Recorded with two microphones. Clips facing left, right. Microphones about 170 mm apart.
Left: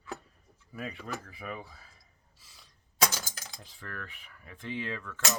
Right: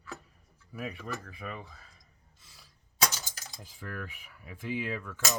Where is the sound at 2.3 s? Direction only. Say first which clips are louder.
Even; centre (ahead or behind).